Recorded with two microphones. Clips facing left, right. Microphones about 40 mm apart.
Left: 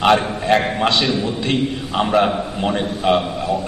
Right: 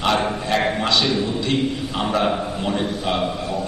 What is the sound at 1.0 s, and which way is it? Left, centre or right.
A man's voice, centre.